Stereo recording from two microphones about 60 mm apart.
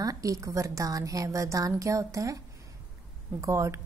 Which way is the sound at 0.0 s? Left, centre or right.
Right.